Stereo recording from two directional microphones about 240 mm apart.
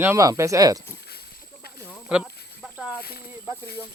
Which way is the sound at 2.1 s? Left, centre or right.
Centre.